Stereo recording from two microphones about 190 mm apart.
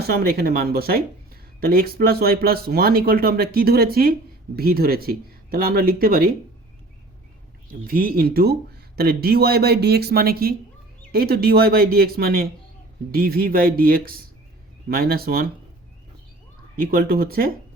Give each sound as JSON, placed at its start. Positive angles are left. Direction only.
{"t": 0.1, "sound": "speech", "side_deg": -55}
{"t": 7.7, "sound": "speech", "side_deg": -50}
{"t": 16.7, "sound": "speech", "side_deg": -50}